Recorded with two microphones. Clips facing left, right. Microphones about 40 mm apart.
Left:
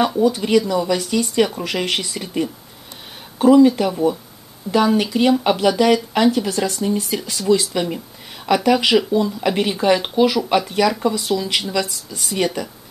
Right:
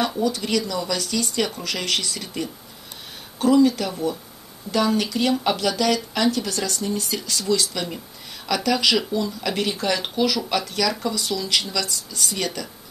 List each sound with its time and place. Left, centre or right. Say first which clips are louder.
0.0 s speech: left 6 dB; centre